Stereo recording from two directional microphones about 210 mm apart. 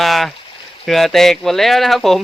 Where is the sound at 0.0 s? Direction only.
Centre (ahead or behind).